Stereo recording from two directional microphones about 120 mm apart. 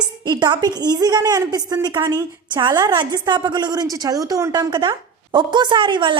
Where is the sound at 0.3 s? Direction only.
35° right (ahead or behind).